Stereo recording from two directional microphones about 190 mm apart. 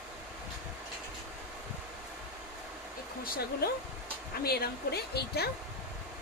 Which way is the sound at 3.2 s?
50° left (ahead or behind).